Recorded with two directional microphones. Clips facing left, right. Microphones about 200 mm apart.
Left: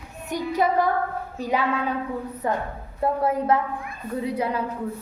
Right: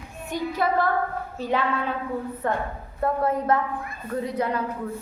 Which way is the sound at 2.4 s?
10° left (ahead or behind).